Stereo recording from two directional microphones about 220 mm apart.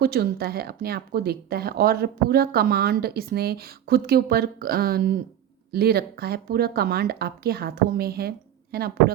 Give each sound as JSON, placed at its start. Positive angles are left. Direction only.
{"t": 0.0, "sound": "speech", "side_deg": -45}